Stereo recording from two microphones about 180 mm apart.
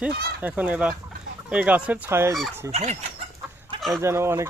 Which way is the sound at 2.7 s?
40° right (ahead or behind).